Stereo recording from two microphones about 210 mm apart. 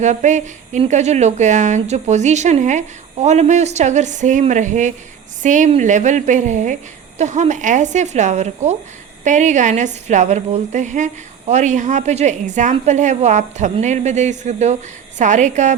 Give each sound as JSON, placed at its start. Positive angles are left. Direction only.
{"t": 0.0, "sound": "a woman's voice", "side_deg": -35}